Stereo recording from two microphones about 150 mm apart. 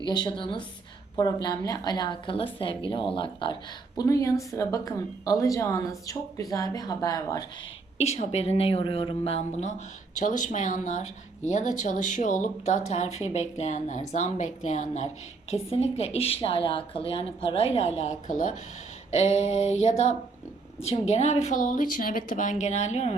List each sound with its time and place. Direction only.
0.0 s a woman's voice: 30° left (ahead or behind)
7.9 s a woman's voice: 45° left (ahead or behind)
10.2 s a woman's voice: 55° left (ahead or behind)